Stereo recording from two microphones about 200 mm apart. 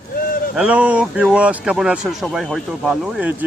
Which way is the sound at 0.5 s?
5° right (ahead or behind).